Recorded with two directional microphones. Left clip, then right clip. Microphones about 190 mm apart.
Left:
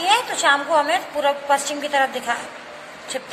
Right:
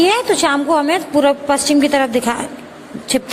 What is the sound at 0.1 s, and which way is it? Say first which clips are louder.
A woman's voice: right 3 dB; 50° right (ahead or behind).